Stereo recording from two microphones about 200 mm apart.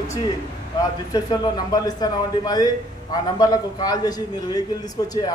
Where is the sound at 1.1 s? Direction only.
20° left (ahead or behind).